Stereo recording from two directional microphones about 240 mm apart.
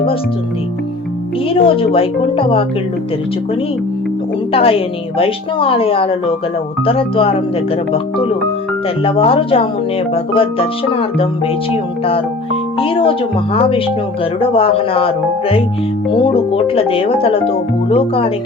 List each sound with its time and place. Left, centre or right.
1.5 s a woman's voice: left
4.5 s a woman's voice: left